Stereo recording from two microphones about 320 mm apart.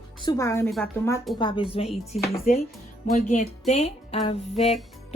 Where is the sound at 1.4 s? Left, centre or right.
Centre.